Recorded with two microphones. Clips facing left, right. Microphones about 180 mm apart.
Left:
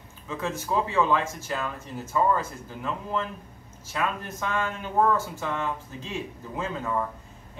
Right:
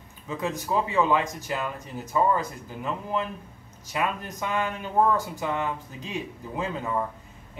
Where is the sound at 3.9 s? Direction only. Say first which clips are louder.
Right 1 dB; 15° right (ahead or behind).